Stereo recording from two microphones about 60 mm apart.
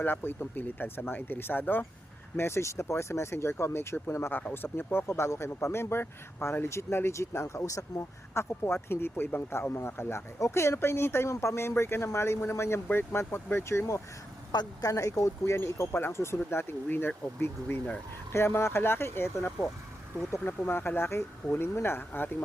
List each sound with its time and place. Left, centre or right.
0.0 s speech: left
2.3 s speech: left
4.3 s speech: left
14.9 s speech: left
15.5 s speech: left
18.3 s speech: left